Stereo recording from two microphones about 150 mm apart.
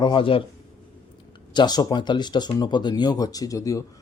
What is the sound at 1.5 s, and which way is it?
A man's voice, 30° left (ahead or behind).